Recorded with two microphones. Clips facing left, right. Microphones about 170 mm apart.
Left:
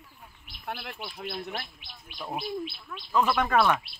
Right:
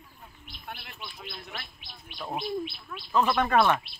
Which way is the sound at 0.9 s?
55° left (ahead or behind).